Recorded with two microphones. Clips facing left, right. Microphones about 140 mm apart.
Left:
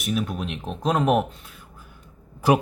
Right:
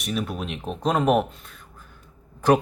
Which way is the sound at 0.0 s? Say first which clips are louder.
Left 2 dB; centre (ahead or behind).